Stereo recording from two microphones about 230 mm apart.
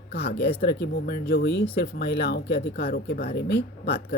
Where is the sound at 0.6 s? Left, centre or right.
Left.